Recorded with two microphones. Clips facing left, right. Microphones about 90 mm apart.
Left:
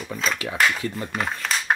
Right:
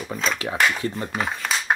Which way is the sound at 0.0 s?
Centre (ahead or behind).